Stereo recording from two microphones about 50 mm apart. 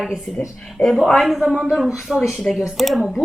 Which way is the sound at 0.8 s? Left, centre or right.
Left.